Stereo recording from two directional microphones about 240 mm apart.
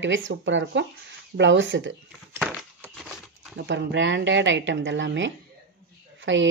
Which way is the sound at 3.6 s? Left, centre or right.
Right.